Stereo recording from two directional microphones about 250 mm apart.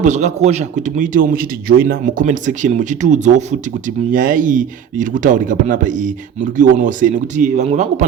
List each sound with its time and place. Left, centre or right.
0.0 s a man's voice: right